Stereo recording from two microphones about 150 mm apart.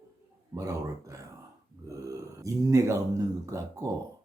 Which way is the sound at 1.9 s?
20° right (ahead or behind).